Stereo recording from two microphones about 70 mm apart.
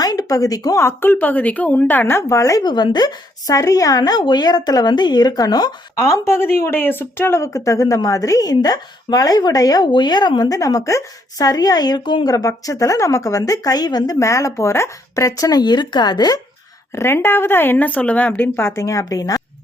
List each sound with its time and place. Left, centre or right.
0.0 s speech: left
0.8 s a woman's voice: left
2.6 s a woman's voice: left
6.0 s a woman's voice: left
7.4 s a woman's voice: left
14.2 s a woman's voice: left
16.9 s speech: left
18.8 s a woman's voice: left